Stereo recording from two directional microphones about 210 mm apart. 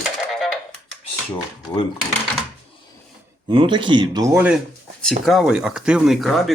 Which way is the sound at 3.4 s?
20° right (ahead or behind).